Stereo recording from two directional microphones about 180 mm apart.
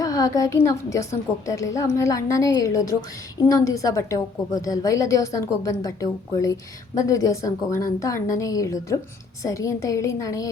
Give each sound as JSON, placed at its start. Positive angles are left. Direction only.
{"t": 0.0, "sound": "a woman's voice", "side_deg": 20}